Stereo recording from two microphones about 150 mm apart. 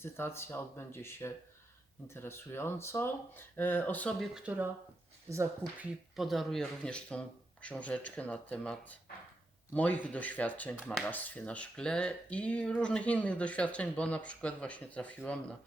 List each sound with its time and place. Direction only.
0.0 s speech: 15° left (ahead or behind)
4.4 s speech: 10° right (ahead or behind)
6.1 s speech: centre (ahead or behind)